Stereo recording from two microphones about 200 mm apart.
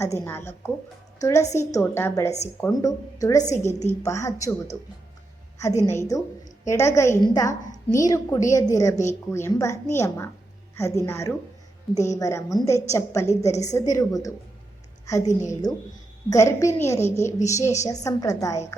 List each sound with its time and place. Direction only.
0.0 s a woman's voice: 15° left (ahead or behind)
5.5 s a woman's voice: 15° left (ahead or behind)